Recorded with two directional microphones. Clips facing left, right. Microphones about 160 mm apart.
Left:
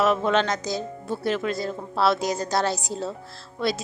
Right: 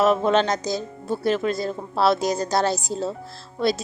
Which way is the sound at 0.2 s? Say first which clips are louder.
Right 3 dB; 35° right (ahead or behind).